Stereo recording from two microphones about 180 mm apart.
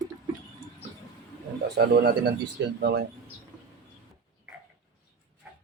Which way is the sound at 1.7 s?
65° right (ahead or behind).